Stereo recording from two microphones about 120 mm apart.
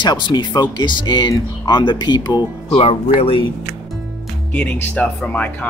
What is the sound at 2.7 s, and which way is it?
Speech, 55° left (ahead or behind).